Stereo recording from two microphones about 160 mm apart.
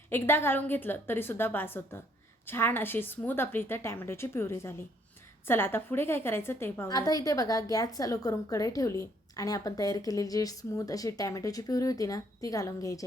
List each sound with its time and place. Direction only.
0.1 s a woman's voice: 15° left (ahead or behind)